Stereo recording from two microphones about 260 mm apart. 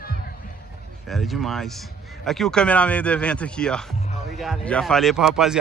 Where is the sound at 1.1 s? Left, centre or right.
Centre.